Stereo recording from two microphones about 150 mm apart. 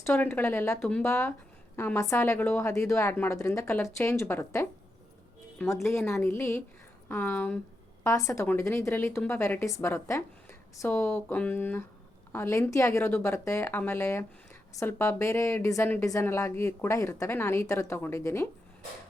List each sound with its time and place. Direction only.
0.0 s a woman's voice: 10° left (ahead or behind)
6.0 s a woman's voice: 5° left (ahead or behind)
6.2 s a woman's voice: 15° left (ahead or behind)
8.0 s a woman's voice: 20° left (ahead or behind)